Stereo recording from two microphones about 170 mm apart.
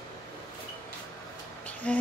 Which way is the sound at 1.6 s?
10° left (ahead or behind).